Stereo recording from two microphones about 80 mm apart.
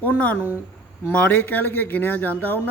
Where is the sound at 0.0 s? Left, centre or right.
Left.